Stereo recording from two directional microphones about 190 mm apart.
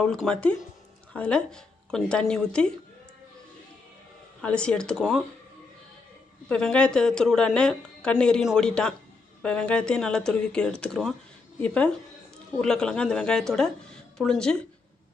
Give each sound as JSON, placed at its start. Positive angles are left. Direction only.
{"t": 0.0, "sound": "a woman's voice", "side_deg": 5}
{"t": 4.4, "sound": "a woman's voice", "side_deg": 5}
{"t": 6.5, "sound": "a woman's voice", "side_deg": 5}